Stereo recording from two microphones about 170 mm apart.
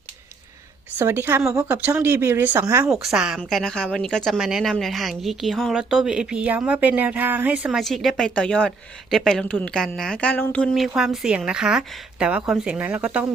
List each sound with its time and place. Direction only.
0.9 s speech: 15° right (ahead or behind)
2.9 s speech: centre (ahead or behind)